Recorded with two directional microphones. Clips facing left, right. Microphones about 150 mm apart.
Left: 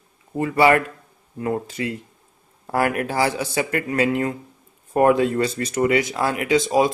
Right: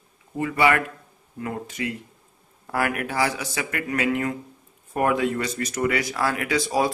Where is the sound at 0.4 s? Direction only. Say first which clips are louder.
Left 4 dB; 35° left (ahead or behind).